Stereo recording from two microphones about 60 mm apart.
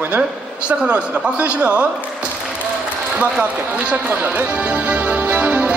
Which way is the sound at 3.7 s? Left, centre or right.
Right.